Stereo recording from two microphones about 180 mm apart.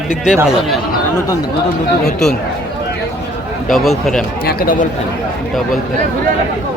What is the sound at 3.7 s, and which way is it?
Speech, centre (ahead or behind).